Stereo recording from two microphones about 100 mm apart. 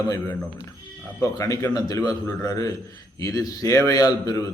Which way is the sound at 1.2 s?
35° left (ahead or behind).